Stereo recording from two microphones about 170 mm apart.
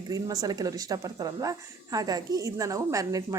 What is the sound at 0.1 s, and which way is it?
A woman's voice, 20° right (ahead or behind).